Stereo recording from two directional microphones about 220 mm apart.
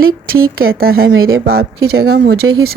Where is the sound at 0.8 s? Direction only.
45° right (ahead or behind).